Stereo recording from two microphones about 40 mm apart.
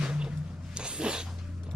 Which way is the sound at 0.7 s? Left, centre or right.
Right.